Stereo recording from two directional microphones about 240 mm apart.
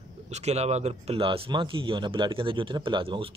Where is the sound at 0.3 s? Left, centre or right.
Right.